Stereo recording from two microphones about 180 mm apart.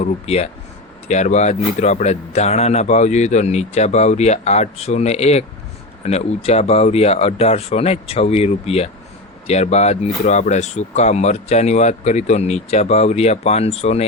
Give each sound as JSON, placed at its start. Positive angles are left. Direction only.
{"t": 0.0, "sound": "speech", "side_deg": 35}